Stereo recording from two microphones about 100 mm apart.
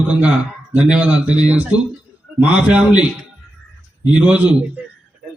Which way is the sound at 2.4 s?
10° right (ahead or behind).